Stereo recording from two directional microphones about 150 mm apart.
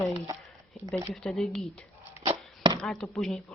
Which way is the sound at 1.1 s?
5° left (ahead or behind).